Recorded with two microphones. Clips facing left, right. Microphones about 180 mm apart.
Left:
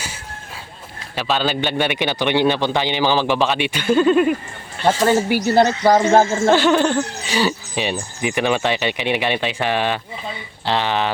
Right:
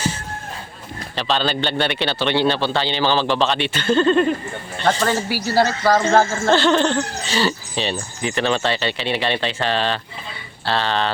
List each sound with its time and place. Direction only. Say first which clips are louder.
1.1 s a man's voice: left 1 dB; 10° left (ahead or behind)
5.3 s a man's voice: left 3 dB; 20° left (ahead or behind)